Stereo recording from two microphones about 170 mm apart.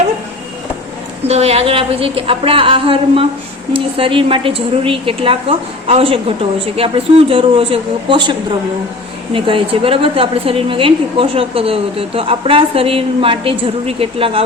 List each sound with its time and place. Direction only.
1.2 s a woman's voice: 35° right (ahead or behind)